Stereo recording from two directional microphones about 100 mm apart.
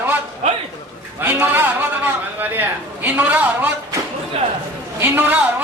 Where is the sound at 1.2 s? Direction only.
20° right (ahead or behind).